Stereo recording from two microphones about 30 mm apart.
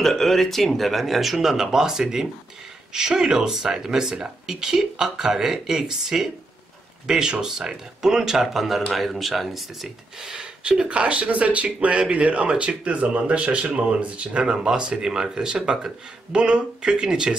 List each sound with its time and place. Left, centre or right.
0.0 s speech: centre
8.9 s speech: centre
10.9 s speech: right
14.0 s speech: right
14.4 s speech: right
14.7 s speech: right